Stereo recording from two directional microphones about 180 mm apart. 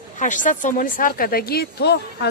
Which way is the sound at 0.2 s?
45° left (ahead or behind).